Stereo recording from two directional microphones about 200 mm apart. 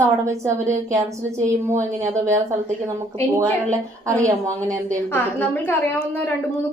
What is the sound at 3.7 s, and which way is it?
A woman's voice, 15° right (ahead or behind).